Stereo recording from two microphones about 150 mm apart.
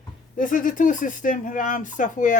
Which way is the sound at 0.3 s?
65° left (ahead or behind).